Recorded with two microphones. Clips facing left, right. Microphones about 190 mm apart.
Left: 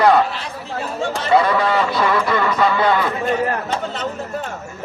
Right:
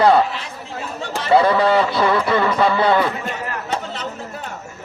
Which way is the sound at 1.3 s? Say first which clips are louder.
Right 2 dB; 30° right (ahead or behind).